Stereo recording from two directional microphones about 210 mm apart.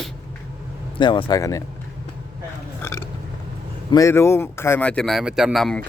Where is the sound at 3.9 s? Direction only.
15° left (ahead or behind).